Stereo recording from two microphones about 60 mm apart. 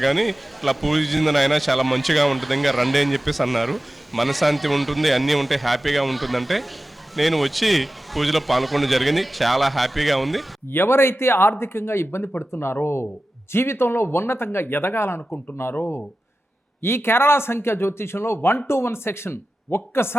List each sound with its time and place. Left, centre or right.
0.0 s a man's voice: centre
10.7 s speech: left
16.8 s speech: left